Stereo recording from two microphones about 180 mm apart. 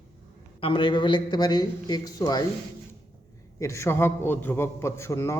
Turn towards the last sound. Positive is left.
turn(degrees=15)  # may be behind; listen again after turning